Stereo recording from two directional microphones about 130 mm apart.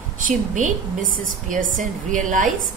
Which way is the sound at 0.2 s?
90° right.